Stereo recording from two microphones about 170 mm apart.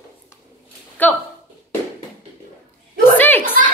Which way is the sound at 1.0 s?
10° left (ahead or behind).